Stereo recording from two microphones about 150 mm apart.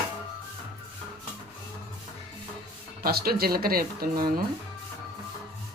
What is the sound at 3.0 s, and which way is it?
Speech, 90° right.